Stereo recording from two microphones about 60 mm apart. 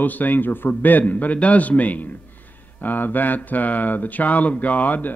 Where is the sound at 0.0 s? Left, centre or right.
Left.